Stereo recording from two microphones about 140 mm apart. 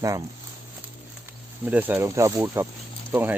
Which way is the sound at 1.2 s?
10° right (ahead or behind).